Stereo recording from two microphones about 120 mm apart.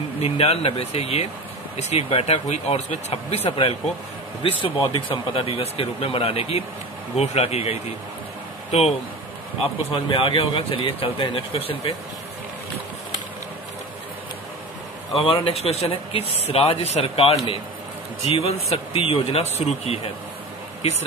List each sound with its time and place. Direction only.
0.2 s speech: 55° left (ahead or behind)
1.8 s speech: 65° left (ahead or behind)
2.0 s speech: 55° left (ahead or behind)
9.8 s speech: 45° left (ahead or behind)
15.1 s speech: 50° left (ahead or behind)